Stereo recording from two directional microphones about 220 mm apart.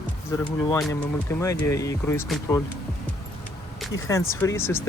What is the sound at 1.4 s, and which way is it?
Speech, 15° left (ahead or behind).